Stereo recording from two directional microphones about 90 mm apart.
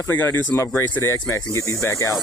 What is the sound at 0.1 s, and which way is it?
Speech, 25° left (ahead or behind).